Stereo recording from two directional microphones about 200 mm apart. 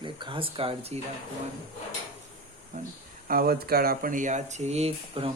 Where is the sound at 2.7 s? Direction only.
40° right (ahead or behind).